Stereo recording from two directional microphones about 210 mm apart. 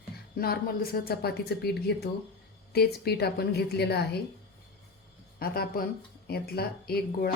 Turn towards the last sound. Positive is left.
turn(degrees=50)  # may be behind; listen again after turning